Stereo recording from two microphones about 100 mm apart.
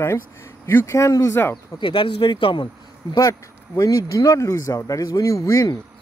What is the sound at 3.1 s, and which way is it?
Speech, 35° left (ahead or behind).